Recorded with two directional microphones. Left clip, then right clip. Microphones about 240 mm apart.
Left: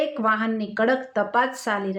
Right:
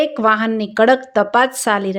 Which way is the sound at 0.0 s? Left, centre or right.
Right.